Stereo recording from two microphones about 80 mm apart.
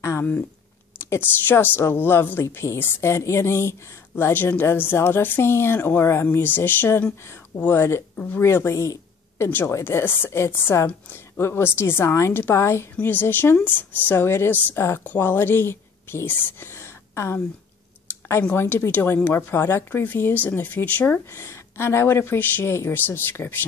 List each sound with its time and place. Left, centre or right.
1.1 s speech: left
2.4 s a woman's voice: left
9.5 s a woman's voice: left
18.5 s speech: left